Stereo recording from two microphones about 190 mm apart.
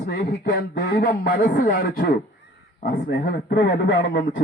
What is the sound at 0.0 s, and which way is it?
A man's voice, 50° left (ahead or behind).